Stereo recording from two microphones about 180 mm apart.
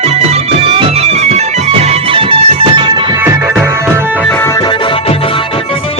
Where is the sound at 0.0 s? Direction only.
35° right (ahead or behind).